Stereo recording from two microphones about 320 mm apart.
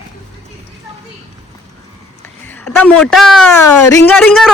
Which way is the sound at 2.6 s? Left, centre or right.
Centre.